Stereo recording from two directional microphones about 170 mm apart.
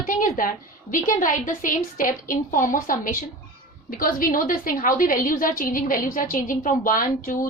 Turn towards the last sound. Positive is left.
turn(degrees=50)  # may be behind; listen again after turning